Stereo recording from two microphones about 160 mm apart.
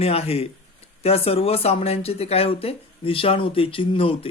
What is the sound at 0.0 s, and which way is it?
Speech, 40° left (ahead or behind).